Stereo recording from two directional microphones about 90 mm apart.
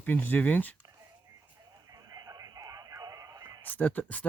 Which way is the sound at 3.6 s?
20° left (ahead or behind).